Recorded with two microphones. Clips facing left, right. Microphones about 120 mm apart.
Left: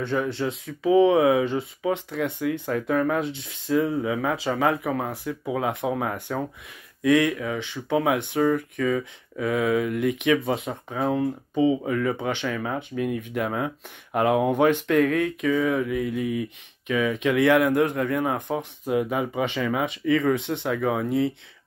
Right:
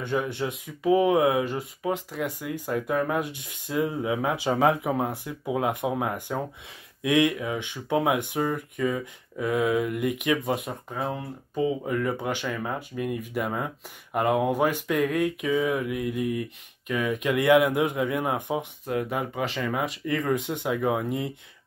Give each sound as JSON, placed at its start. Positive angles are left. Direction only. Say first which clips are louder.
{"t": 0.0, "sound": "speech", "louder": "left 2 dB", "side_deg": -15}